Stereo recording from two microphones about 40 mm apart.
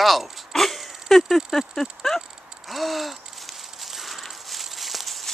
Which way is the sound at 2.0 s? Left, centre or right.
Centre.